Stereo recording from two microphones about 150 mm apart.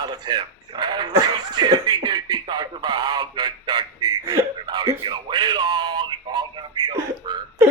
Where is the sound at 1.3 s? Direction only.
30° right (ahead or behind).